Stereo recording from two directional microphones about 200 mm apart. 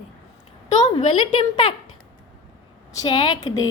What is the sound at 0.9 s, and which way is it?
Speech, 25° left (ahead or behind).